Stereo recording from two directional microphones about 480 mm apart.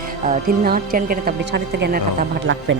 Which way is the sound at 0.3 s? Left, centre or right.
Centre.